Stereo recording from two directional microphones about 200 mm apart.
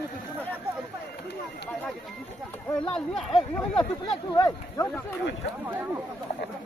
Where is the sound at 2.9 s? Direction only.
5° left (ahead or behind).